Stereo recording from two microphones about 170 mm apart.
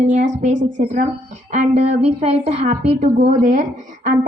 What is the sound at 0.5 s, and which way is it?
Speech, 90° right.